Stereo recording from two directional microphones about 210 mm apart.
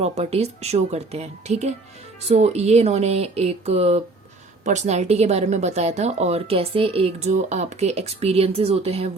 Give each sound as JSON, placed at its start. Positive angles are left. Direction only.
{"t": 0.0, "sound": "speech", "side_deg": -30}